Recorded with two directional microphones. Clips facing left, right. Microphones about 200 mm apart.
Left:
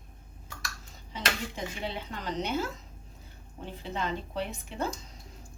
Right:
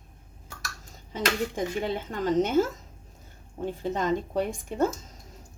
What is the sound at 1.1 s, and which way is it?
A woman's voice, 45° right (ahead or behind).